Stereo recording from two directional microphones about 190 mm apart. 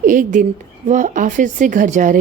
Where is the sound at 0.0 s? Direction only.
45° right (ahead or behind).